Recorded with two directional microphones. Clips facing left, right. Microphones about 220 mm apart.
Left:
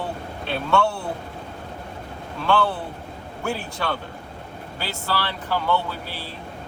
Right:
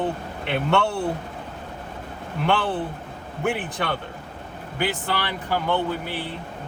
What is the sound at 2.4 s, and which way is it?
Speech, 20° right (ahead or behind).